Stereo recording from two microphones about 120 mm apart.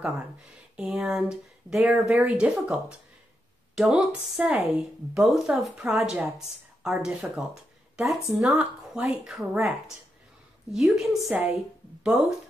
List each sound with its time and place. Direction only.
0.7 s speech: 5° right (ahead or behind)
2.0 s speech: 20° right (ahead or behind)
2.3 s speech: 5° right (ahead or behind)
10.7 s speech: 5° right (ahead or behind)